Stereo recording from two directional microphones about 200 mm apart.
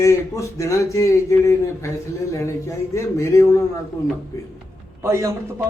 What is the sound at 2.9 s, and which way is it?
Speech, 15° left (ahead or behind).